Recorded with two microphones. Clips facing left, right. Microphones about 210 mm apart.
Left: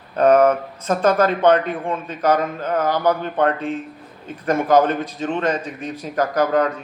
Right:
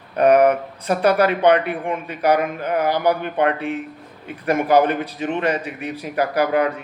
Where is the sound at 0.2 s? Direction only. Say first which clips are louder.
Even; 15° right (ahead or behind).